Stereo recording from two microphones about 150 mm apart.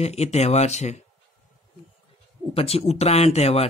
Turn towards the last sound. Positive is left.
turn(degrees=45)  # may be behind; listen again after turning